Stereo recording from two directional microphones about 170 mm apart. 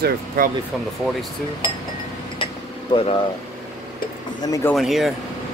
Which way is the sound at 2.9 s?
35° left (ahead or behind).